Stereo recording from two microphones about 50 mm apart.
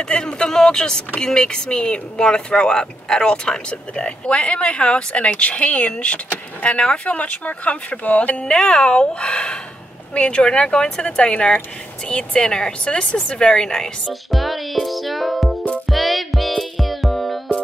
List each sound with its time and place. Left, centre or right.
0.0 s speech: centre
14.0 s music: centre